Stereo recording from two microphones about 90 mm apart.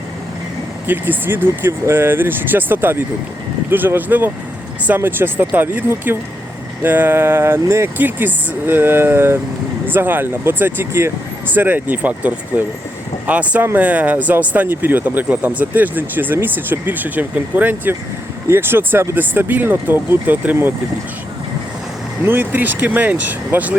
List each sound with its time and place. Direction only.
0.9 s speech: 20° right (ahead or behind)
22.3 s speech: 20° right (ahead or behind)